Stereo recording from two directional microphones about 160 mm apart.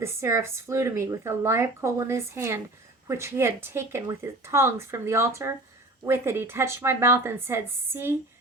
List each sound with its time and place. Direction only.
0.0 s speech: 15° right (ahead or behind)